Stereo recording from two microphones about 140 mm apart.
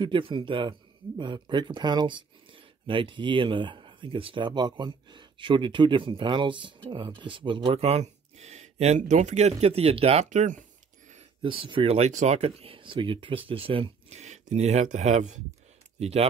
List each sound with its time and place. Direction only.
0.0 s speech: 35° right (ahead or behind); by 10.6 s 60° right (ahead or behind)
11.4 s speech: 40° right (ahead or behind)